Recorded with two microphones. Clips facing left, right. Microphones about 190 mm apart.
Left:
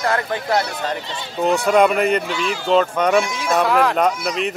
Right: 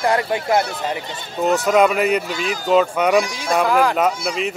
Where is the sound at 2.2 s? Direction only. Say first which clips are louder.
Left 1 dB; 40° right (ahead or behind).